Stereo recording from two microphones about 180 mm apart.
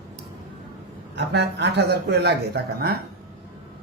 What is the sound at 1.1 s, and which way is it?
A man's voice, 70° right (ahead or behind).